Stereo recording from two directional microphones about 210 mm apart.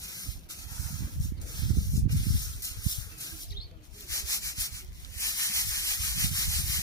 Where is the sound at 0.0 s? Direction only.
15° left (ahead or behind).